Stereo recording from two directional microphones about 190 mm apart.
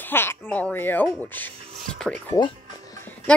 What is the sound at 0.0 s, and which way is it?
Speech, 10° left (ahead or behind).